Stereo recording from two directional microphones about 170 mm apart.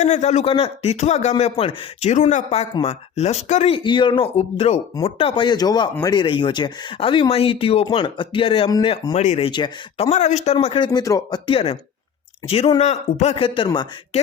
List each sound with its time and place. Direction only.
0.0 s speech: 45° left (ahead or behind)
3.8 s speech: 30° left (ahead or behind)
9.5 s speech: 30° left (ahead or behind)
10.1 s speech: 40° left (ahead or behind)